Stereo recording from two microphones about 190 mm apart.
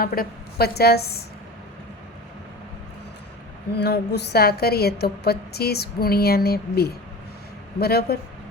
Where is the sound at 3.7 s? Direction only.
60° left (ahead or behind).